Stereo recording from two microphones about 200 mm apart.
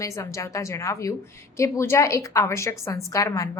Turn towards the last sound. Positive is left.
turn(degrees=15)  # may be behind; listen again after turning